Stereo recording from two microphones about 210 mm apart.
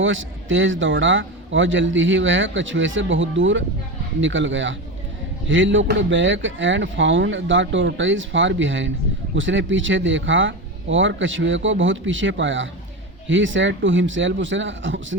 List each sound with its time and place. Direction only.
0.0 s a man's voice: 65° right (ahead or behind)